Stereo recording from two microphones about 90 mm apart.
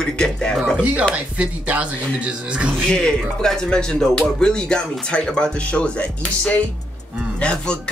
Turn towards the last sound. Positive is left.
turn(degrees=10)  # may be behind; listen again after turning